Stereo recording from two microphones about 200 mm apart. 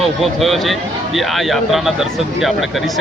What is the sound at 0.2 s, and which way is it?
Speech, centre (ahead or behind).